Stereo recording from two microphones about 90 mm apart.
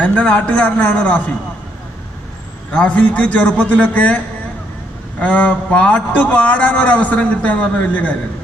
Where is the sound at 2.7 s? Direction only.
15° left (ahead or behind).